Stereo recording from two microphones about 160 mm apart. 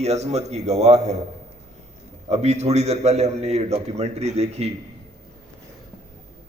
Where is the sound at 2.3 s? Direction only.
45° right (ahead or behind).